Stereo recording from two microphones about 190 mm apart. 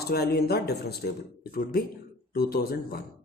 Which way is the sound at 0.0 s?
55° left (ahead or behind).